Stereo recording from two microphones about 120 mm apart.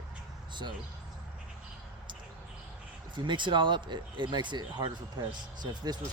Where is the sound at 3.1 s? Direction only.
40° right (ahead or behind).